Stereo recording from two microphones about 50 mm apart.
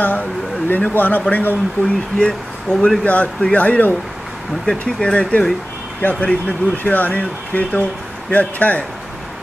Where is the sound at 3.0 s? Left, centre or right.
Left.